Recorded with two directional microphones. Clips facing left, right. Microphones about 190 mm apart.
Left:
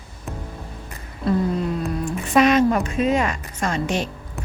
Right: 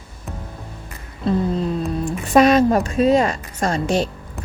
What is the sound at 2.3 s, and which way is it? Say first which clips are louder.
A woman's voice: right 3 dB; 35° right (ahead or behind).